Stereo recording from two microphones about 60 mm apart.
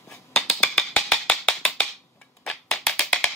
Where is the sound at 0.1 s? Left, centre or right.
Centre.